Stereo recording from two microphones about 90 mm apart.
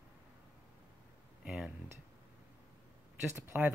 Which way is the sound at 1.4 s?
5° right (ahead or behind).